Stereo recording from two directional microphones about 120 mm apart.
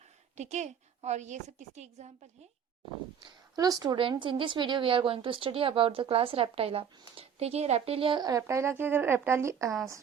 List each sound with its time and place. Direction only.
0.3 s a woman's voice: 70° right (ahead or behind)
3.2 s a woman's voice: 35° right (ahead or behind)
3.9 s a woman's voice: 45° right (ahead or behind)
8.2 s speech: 25° right (ahead or behind)